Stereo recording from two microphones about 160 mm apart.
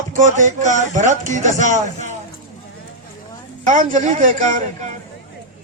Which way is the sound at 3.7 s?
50° right (ahead or behind).